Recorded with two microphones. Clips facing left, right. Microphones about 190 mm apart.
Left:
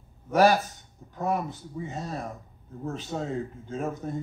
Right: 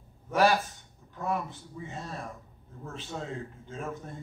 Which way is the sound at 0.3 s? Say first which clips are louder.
Left 4 dB; 40° left (ahead or behind).